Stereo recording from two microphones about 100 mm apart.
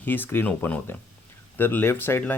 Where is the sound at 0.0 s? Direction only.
20° left (ahead or behind).